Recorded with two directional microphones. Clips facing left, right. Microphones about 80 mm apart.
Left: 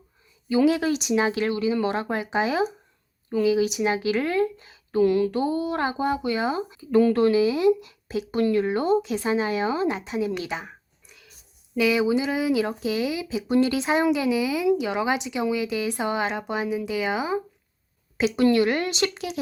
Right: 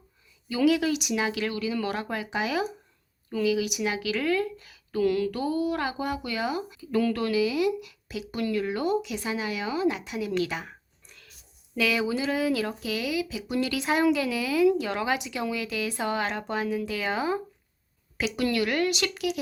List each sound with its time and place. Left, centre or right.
0.4 s speech: left
11.0 s a sound: centre
11.8 s speech: centre
18.3 s speech: left